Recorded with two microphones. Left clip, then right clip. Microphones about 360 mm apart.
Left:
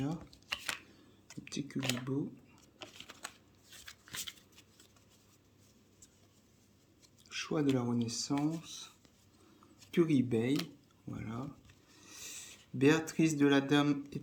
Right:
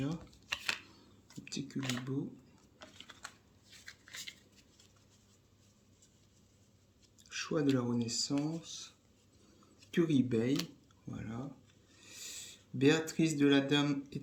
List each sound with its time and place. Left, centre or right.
0.0 s shuffling cards: centre
1.5 s typing: centre
2.7 s typing: left
7.3 s speech: centre
9.9 s speech: centre